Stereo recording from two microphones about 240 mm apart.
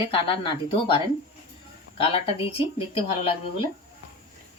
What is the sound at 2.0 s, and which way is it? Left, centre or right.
Speech, left.